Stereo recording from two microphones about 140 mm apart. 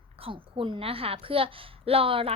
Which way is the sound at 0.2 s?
40° right (ahead or behind).